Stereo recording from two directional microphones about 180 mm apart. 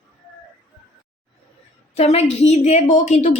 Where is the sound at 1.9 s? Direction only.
35° left (ahead or behind).